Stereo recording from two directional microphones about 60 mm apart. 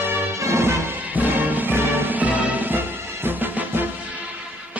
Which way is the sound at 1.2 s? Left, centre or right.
Right.